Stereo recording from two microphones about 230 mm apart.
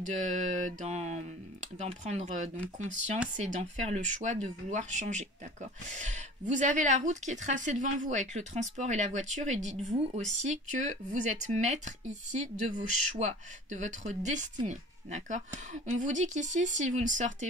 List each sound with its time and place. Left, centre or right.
0.0 s speech: right